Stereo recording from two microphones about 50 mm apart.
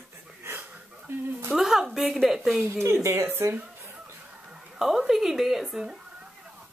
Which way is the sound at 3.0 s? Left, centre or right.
Right.